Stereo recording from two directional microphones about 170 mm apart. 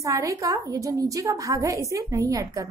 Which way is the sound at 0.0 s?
20° right (ahead or behind).